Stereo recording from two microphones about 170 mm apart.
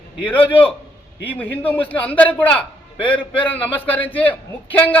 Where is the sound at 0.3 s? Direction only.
30° left (ahead or behind).